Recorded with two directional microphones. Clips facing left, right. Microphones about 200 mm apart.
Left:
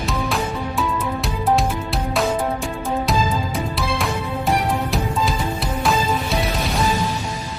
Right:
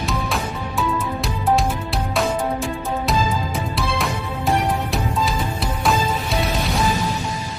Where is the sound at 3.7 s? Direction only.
Centre (ahead or behind).